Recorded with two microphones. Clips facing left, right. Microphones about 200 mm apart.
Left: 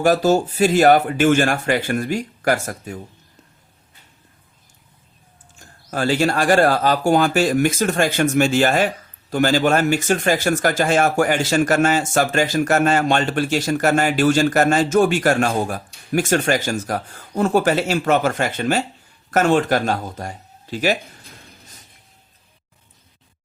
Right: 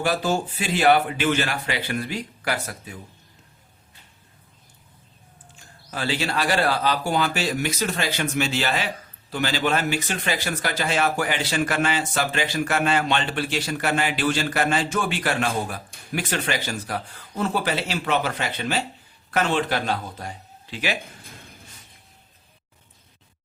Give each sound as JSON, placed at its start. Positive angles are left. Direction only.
{"t": 0.0, "sound": "speech", "side_deg": 45}
{"t": 5.5, "sound": "speech", "side_deg": 45}